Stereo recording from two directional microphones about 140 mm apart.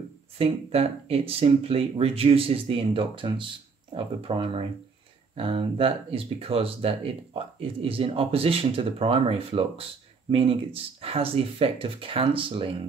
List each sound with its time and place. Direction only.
0.4 s speech: 45° right (ahead or behind)